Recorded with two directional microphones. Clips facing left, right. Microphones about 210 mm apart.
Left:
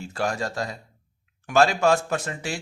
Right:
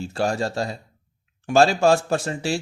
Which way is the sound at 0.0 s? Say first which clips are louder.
Right 4 dB; 30° right (ahead or behind).